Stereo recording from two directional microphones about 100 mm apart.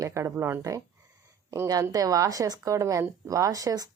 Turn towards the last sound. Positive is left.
turn(degrees=-40)  # may be behind; listen again after turning